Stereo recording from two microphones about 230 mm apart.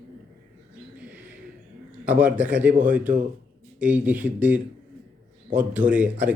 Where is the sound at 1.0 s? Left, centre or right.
Centre.